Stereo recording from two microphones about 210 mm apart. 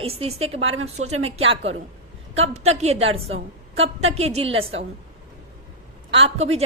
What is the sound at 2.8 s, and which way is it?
A woman's voice, 30° right (ahead or behind).